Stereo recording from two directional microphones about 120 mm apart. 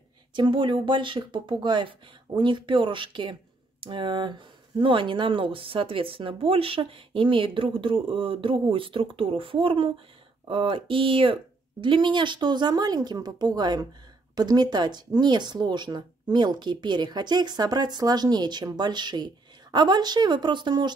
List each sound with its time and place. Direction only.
0.3 s speech: 40° right (ahead or behind)